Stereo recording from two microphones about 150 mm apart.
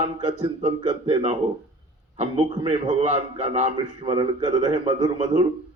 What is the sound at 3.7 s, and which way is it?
Speech, 30° right (ahead or behind).